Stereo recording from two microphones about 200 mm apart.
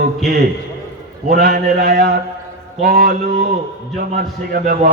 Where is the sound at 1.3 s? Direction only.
50° right (ahead or behind).